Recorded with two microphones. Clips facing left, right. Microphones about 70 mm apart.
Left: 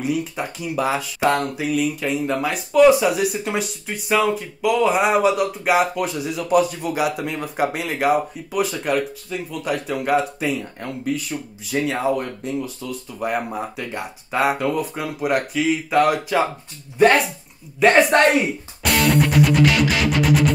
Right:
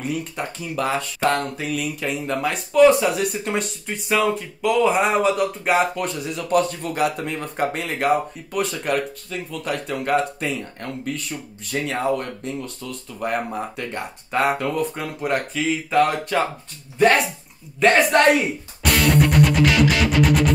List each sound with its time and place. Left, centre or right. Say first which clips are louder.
0.0 s speech: left 3 dB; centre
17.8 s speech: left 1 dB; centre
18.4 s music: even; centre